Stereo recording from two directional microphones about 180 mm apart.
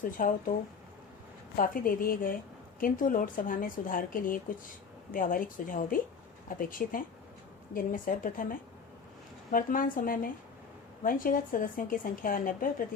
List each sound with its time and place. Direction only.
0.0 s a woman's voice: 50° left (ahead or behind)
1.5 s a woman's voice: 50° left (ahead or behind)